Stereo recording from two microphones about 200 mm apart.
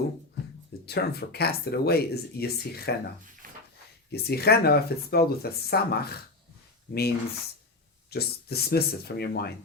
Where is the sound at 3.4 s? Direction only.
45° right (ahead or behind).